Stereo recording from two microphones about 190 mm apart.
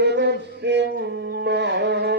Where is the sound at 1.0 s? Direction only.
65° right (ahead or behind).